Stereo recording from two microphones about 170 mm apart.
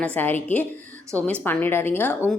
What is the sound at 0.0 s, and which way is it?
A woman's voice, 10° left (ahead or behind).